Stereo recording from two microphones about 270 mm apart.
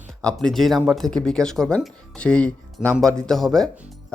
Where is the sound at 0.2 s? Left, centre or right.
Centre.